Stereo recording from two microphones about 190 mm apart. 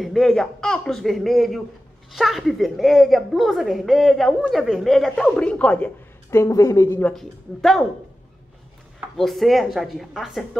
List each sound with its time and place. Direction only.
0.0 s a woman's voice: centre (ahead or behind)
9.1 s a woman's voice: centre (ahead or behind)